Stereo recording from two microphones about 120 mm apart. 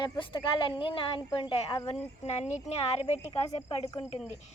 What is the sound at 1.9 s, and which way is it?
Speech, 65° left (ahead or behind).